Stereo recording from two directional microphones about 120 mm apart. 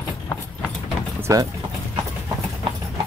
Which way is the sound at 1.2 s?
30° right (ahead or behind).